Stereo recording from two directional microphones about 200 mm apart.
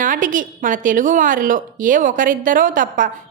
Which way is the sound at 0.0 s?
40° right (ahead or behind).